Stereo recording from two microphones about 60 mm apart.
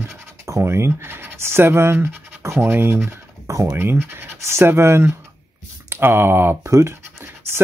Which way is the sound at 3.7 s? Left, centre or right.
Right.